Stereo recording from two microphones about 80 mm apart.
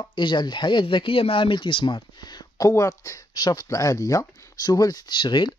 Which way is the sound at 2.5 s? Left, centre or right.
Left.